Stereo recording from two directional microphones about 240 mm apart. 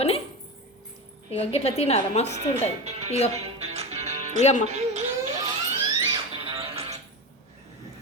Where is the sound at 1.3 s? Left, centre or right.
Left.